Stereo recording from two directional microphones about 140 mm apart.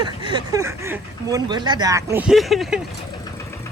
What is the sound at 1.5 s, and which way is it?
Speech, 30° right (ahead or behind).